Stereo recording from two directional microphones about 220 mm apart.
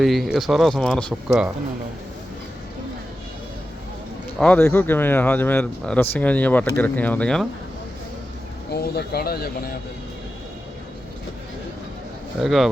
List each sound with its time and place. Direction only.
0.0 s speech: centre (ahead or behind)
4.4 s speech: 5° left (ahead or behind)
8.7 s speech: 45° left (ahead or behind)
12.4 s speech: centre (ahead or behind)